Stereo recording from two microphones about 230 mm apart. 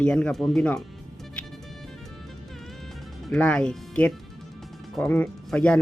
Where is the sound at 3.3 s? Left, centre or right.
Centre.